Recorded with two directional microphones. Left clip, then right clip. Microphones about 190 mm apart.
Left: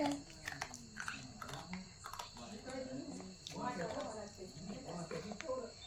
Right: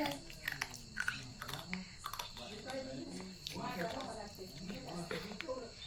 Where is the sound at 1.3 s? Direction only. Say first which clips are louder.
Right 4 dB; 15° left (ahead or behind).